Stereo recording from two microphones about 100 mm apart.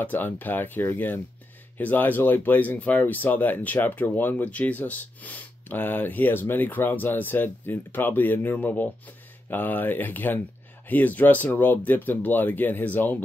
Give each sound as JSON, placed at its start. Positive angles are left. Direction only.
{"t": 0.0, "sound": "speech", "side_deg": 20}